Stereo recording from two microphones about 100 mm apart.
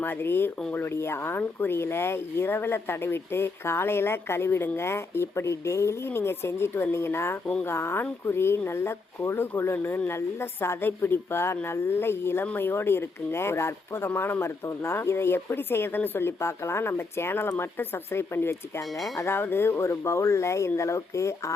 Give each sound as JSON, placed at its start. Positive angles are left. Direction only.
{"t": 0.0, "sound": "speech", "side_deg": 20}